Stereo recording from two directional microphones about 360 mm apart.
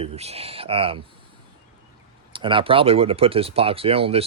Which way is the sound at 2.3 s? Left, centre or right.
Centre.